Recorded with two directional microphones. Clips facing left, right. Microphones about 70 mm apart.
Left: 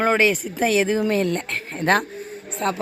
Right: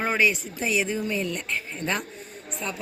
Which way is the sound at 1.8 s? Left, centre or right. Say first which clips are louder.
Left 11 dB; left.